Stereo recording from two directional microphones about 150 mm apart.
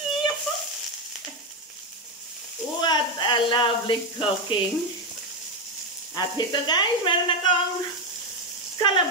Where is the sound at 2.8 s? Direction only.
30° left (ahead or behind).